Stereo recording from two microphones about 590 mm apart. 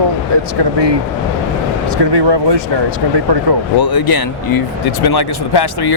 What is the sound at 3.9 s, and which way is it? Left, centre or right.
Speech, left.